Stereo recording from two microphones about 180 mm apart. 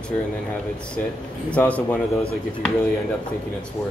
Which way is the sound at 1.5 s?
10° left (ahead or behind).